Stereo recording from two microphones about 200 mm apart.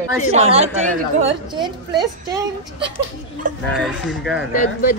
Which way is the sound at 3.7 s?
Centre (ahead or behind).